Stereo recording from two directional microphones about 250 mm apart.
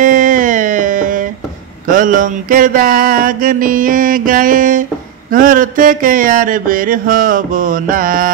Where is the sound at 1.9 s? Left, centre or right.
Right.